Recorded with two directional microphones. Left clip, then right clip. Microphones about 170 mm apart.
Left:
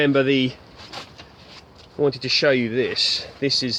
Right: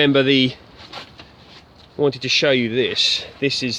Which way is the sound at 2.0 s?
20° right (ahead or behind).